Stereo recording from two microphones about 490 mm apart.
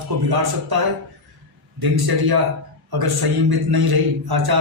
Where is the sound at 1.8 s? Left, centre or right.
Right.